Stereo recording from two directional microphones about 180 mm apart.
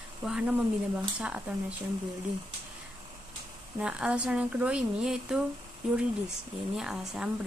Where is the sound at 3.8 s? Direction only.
5° right (ahead or behind).